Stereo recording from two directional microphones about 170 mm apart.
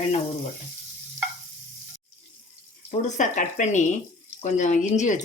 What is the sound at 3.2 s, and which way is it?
Speech, 45° left (ahead or behind).